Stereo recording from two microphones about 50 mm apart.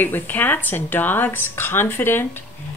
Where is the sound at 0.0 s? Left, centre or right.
Left.